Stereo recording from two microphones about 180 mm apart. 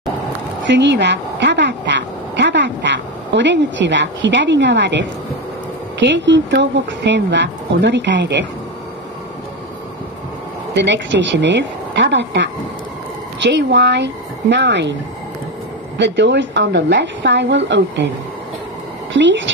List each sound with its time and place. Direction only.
0.7 s a sound: 75° right (ahead or behind)
5.9 s speech: 85° right
10.7 s a woman's voice: 80° right
16.0 s a woman's voice: 80° right
19.1 s a woman's voice: 90° right